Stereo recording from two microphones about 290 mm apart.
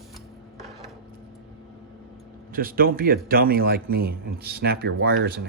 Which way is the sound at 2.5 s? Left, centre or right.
Right.